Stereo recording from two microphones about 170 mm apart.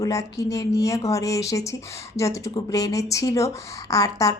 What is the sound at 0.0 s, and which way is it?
Speech, 20° left (ahead or behind).